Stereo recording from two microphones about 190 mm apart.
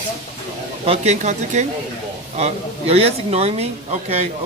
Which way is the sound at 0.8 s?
40° right (ahead or behind).